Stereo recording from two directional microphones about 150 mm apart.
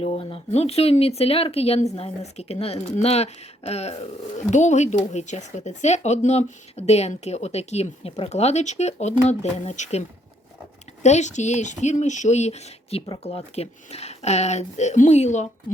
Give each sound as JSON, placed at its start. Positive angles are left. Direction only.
{"t": 0.0, "sound": "speech", "side_deg": 40}